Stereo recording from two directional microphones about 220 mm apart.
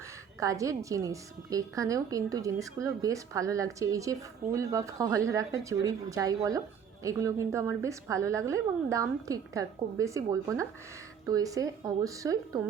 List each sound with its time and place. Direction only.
0.3 s a woman's voice: 15° right (ahead or behind)